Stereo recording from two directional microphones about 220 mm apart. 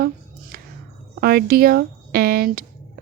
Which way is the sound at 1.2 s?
45° right (ahead or behind).